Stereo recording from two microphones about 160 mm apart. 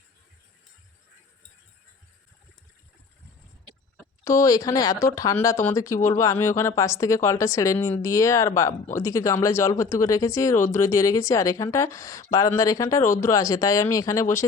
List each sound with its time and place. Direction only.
4.2 s speech: 20° left (ahead or behind)